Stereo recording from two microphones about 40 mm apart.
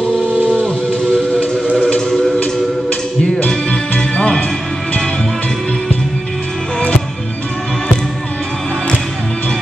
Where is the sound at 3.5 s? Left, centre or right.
Left.